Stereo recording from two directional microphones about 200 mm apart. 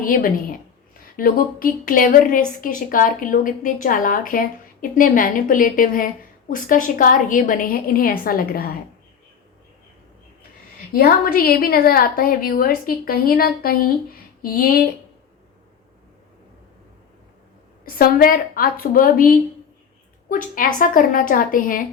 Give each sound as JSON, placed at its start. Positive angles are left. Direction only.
{"t": 0.0, "sound": "a woman's voice", "side_deg": 45}
{"t": 10.9, "sound": "a woman's voice", "side_deg": 45}
{"t": 17.8, "sound": "a woman's voice", "side_deg": 45}